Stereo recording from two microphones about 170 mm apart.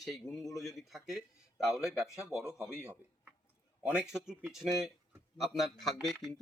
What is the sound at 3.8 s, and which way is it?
Speech, 5° right (ahead or behind).